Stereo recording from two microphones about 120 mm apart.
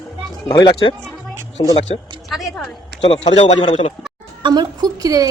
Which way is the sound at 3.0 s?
50° left (ahead or behind).